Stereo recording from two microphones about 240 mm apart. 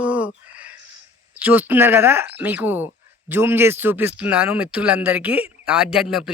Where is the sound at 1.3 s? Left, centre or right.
Centre.